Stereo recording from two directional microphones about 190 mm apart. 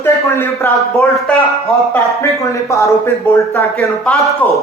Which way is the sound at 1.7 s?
15° left (ahead or behind).